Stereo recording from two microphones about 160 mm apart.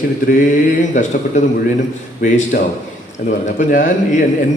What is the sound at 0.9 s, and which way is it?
Speech, 50° left (ahead or behind).